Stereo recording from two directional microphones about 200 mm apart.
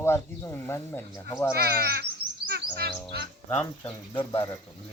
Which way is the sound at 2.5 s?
55° right (ahead or behind).